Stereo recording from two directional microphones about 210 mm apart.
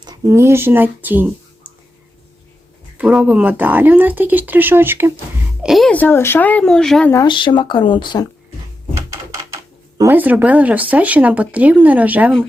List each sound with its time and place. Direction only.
0.0 s speech: 20° right (ahead or behind)
3.0 s speech: 5° right (ahead or behind)
5.6 s speech: centre (ahead or behind)
7.1 s speech: 20° left (ahead or behind)
9.0 s a sound: 15° right (ahead or behind)
10.0 s speech: 10° right (ahead or behind)